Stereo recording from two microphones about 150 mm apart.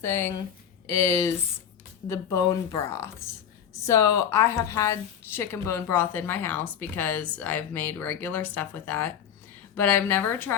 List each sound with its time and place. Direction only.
0.0 s a woman's voice: 15° left (ahead or behind)